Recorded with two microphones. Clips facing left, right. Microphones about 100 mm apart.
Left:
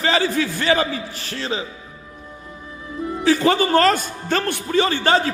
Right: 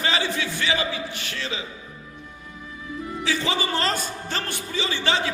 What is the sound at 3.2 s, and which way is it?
A man's voice, 45° left (ahead or behind).